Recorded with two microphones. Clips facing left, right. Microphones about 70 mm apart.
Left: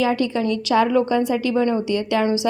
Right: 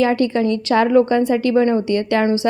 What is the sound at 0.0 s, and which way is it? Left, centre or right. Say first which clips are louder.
A woman's voice: right 4 dB; right.